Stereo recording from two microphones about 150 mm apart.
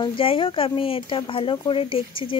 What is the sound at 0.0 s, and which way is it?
Speech, 35° left (ahead or behind).